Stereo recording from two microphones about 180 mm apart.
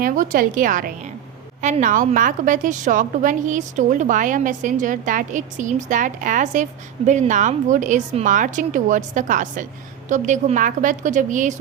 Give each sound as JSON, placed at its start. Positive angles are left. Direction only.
{"t": 0.0, "sound": "a woman's voice", "side_deg": -50}